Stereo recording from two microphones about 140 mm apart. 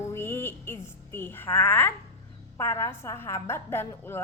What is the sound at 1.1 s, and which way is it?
A woman's voice, 15° left (ahead or behind).